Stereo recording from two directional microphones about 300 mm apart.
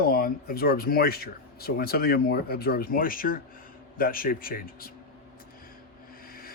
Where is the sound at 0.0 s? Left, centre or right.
Left.